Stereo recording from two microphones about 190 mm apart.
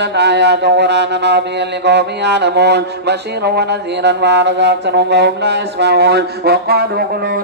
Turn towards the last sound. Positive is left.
turn(degrees=-50)  # may be behind; listen again after turning